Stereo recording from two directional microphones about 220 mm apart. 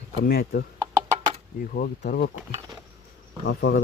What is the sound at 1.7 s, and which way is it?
Speech, 45° left (ahead or behind).